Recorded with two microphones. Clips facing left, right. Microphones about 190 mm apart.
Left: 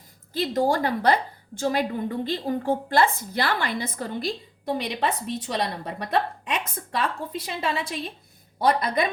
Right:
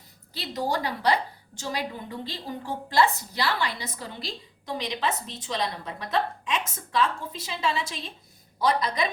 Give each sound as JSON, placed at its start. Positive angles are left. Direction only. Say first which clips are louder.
{"t": 0.3, "sound": "a woman's voice", "louder": "left 6 dB", "side_deg": 50}